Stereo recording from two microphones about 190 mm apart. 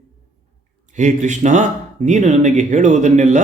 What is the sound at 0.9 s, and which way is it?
A man's voice, 40° right (ahead or behind).